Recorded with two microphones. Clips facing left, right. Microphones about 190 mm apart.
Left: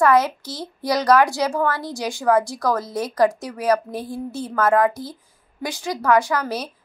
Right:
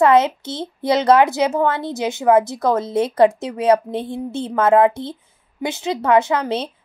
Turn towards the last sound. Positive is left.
turn(degrees=-25)  # may be behind; listen again after turning